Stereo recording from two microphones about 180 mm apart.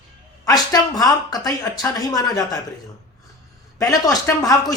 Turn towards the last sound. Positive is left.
turn(degrees=20)  # may be behind; listen again after turning